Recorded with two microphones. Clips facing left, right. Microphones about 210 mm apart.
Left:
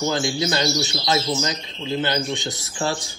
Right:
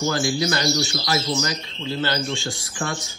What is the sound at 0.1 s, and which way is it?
Speech, 20° left (ahead or behind).